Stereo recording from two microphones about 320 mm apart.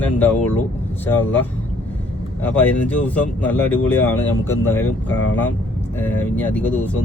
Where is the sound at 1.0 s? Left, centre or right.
Centre.